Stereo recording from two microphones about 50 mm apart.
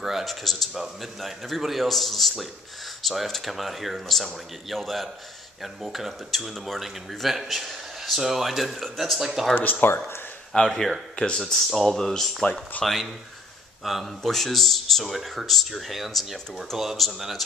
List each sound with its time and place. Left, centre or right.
0.0 s speech: centre
9.2 s speech: centre
9.6 s speech: left
10.5 s speech: centre
11.1 s speech: centre